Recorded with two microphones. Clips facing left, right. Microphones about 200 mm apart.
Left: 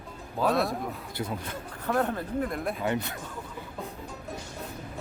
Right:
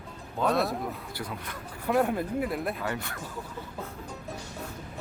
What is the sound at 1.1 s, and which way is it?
Speech, 25° left (ahead or behind).